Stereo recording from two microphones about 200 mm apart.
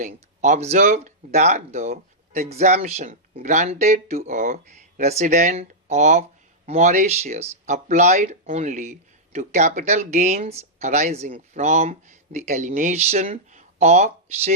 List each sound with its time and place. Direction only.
0.0 s speech: 35° right (ahead or behind)